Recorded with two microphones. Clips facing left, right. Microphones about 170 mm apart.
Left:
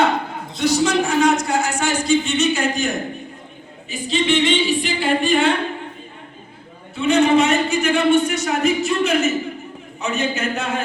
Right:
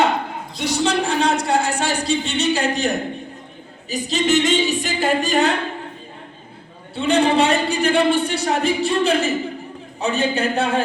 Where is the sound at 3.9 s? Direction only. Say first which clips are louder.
Right 1 dB; 40° right (ahead or behind).